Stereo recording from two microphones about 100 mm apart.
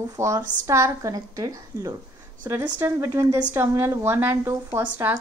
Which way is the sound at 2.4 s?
20° right (ahead or behind).